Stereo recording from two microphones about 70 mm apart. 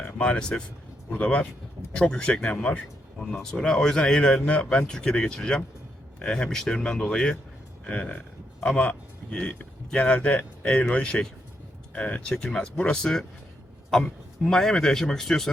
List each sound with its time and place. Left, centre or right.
0.2 s a man's voice: centre
3.2 s a man's voice: centre